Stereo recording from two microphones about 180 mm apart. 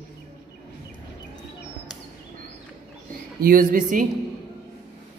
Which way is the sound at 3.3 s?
55° right (ahead or behind).